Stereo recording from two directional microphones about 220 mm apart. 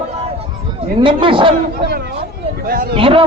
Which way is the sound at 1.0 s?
25° right (ahead or behind).